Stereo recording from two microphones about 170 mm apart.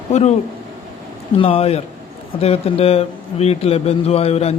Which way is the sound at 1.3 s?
30° left (ahead or behind).